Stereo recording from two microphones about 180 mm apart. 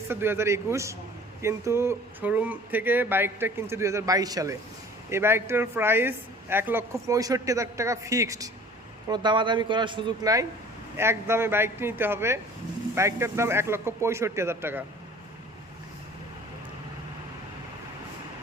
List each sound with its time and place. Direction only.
0.1 s a man's voice: 10° right (ahead or behind)